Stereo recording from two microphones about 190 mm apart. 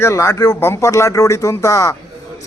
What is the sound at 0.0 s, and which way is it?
Speech, 15° left (ahead or behind).